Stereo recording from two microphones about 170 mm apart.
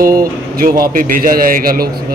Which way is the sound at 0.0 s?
55° right (ahead or behind).